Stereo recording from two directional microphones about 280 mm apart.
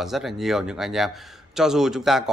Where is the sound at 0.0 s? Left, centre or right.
Centre.